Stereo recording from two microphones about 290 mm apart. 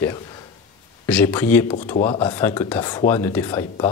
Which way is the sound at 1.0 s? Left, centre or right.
Centre.